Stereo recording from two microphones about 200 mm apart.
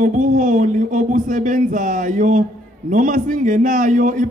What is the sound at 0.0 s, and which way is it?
A man's voice, 40° right (ahead or behind).